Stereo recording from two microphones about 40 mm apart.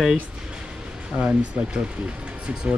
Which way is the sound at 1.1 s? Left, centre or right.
Right.